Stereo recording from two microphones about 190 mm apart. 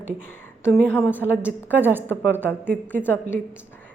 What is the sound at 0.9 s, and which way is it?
Speech, 10° left (ahead or behind).